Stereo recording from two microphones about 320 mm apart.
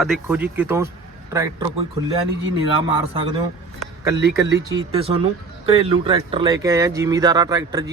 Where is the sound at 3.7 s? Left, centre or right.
Centre.